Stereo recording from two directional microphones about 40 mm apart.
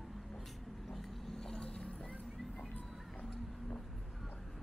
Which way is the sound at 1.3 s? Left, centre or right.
Centre.